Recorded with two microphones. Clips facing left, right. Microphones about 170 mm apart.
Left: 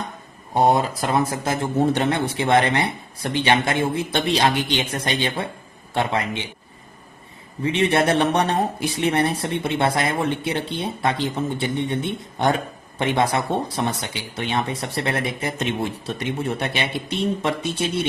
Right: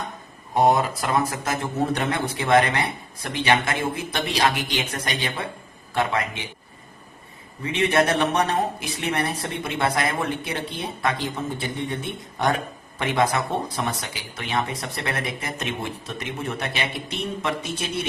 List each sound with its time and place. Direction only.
0.5 s speech: 30° left (ahead or behind)
7.6 s speech: 30° left (ahead or behind)